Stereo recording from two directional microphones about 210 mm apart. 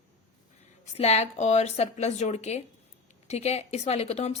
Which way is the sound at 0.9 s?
30° left (ahead or behind).